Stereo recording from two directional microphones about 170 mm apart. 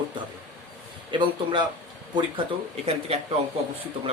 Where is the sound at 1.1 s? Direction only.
30° right (ahead or behind).